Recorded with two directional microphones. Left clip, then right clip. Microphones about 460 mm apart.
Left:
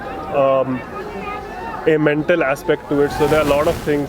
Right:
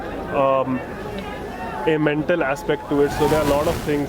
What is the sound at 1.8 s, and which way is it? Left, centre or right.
Speech, centre.